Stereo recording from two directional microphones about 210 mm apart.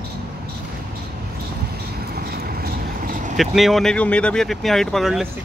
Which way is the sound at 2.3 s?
45° right (ahead or behind).